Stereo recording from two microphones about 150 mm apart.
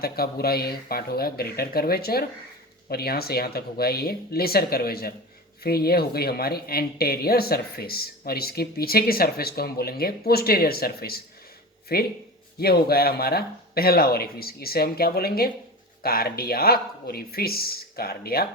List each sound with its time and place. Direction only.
0.0 s speech: 90° left